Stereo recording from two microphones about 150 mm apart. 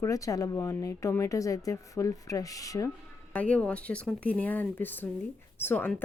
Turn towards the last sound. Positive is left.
turn(degrees=10)  # may be behind; listen again after turning